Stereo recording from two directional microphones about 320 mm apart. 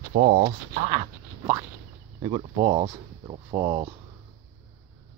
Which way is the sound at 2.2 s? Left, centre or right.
Centre.